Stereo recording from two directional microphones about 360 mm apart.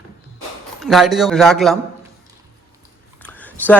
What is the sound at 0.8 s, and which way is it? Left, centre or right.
A man's voice, centre.